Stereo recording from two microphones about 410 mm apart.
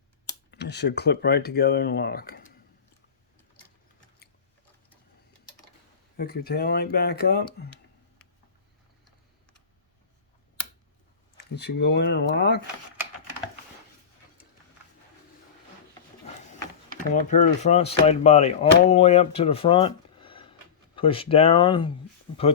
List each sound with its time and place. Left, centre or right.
0.5 s speech: left
6.1 s speech: left
11.3 s speech: left
17.0 s speech: centre